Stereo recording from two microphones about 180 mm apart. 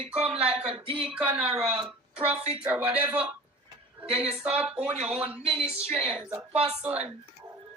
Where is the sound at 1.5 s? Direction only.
5° right (ahead or behind).